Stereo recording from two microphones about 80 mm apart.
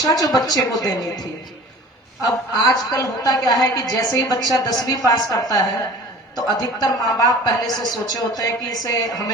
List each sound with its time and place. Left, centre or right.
0.0 s a woman's voice: left
2.6 s a woman's voice: left